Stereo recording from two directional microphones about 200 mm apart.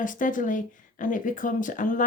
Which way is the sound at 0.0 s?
40° left (ahead or behind).